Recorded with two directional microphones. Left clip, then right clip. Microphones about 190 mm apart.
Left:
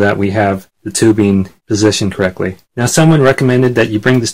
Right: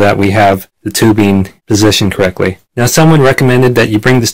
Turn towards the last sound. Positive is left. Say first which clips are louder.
# right 3 dB
turn(degrees=-35)  # may be behind; listen again after turning